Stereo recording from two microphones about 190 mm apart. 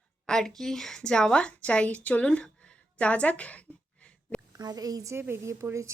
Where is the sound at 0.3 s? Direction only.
5° left (ahead or behind).